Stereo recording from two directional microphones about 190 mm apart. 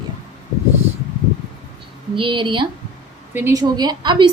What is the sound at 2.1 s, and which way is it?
Speech, 25° right (ahead or behind).